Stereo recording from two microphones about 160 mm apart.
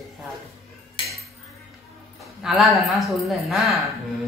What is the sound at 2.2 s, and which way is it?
A woman's voice, centre (ahead or behind).